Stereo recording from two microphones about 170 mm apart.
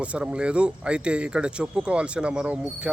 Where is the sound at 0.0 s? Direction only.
5° right (ahead or behind).